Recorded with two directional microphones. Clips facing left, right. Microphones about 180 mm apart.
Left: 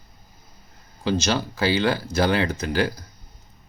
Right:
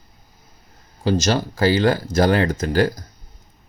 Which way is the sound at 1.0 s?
45° right (ahead or behind).